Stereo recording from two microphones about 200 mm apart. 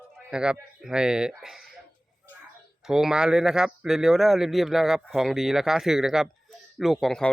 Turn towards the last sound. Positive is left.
turn(degrees=0)  # may be behind; listen again after turning